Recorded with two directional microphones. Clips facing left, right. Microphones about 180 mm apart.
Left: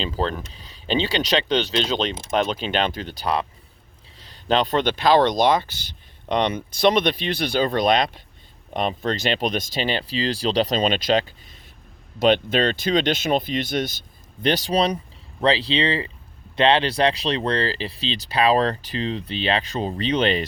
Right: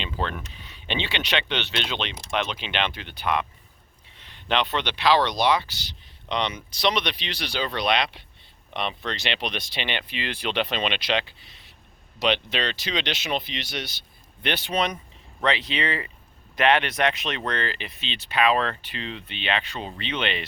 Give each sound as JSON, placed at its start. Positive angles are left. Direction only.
{"t": 0.0, "sound": "speech", "side_deg": 35}